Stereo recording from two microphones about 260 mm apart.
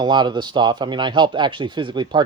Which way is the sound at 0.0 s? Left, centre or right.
Centre.